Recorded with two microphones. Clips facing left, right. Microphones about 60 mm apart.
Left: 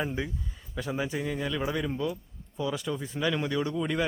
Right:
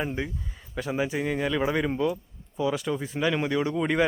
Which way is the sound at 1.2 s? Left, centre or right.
Right.